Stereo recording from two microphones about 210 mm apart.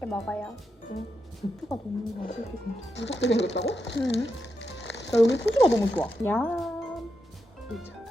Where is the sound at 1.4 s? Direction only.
40° left (ahead or behind).